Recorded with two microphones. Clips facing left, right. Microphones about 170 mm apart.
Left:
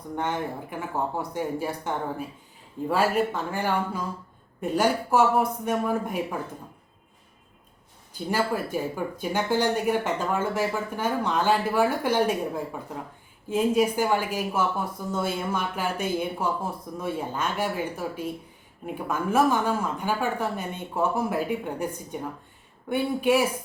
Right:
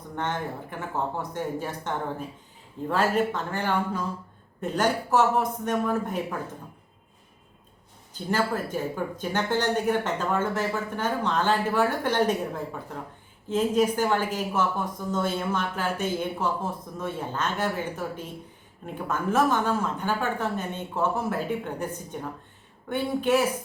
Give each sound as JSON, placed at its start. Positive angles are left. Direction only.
{"t": 0.2, "sound": "a woman's voice", "side_deg": 10}
{"t": 8.1, "sound": "a woman's voice", "side_deg": 10}